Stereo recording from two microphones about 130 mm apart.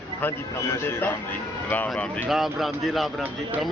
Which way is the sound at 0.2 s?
20° left (ahead or behind).